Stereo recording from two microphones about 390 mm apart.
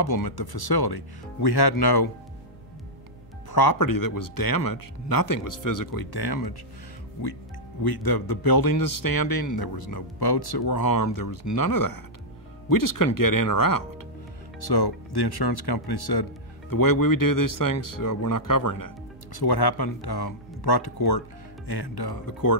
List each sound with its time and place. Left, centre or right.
0.0 s speech: left
3.5 s a man's voice: left
7.8 s a man's voice: left
11.0 s a man's voice: left
14.6 s speech: left